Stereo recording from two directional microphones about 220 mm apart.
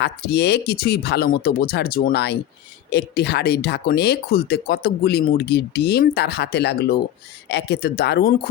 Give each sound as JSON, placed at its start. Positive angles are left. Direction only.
{"t": 0.0, "sound": "speech", "side_deg": 50}